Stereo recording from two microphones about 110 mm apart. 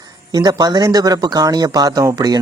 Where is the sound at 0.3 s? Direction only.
35° right (ahead or behind).